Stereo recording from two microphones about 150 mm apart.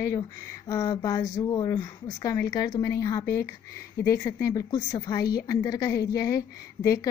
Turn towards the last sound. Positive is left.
turn(degrees=20)  # may be behind; listen again after turning